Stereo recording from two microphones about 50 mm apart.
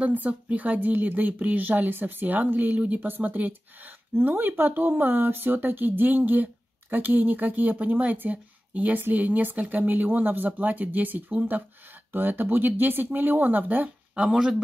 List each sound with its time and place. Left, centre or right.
0.0 s speech: right
14.1 s speech: centre